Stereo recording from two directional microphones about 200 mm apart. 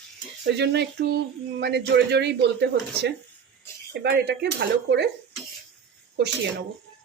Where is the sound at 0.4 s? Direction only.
60° right (ahead or behind).